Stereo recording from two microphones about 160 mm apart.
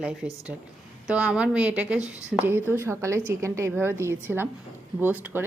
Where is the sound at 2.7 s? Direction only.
15° right (ahead or behind).